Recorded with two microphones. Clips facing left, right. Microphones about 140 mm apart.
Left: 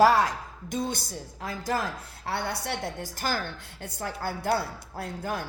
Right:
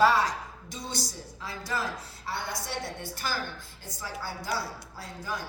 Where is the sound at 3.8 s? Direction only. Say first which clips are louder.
Left 5 dB; 60° left (ahead or behind).